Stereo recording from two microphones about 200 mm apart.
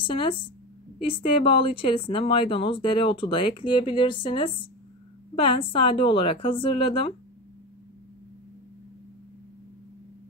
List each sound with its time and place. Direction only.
0.0 s speech: 25° left (ahead or behind)